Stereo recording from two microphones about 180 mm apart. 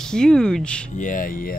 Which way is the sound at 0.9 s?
45° left (ahead or behind).